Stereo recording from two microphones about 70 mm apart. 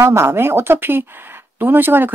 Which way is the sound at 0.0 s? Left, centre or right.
Right.